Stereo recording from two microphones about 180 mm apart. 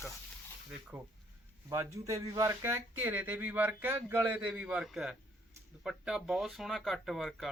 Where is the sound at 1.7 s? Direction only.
15° right (ahead or behind).